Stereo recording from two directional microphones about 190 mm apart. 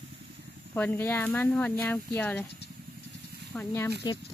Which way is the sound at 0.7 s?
10° left (ahead or behind).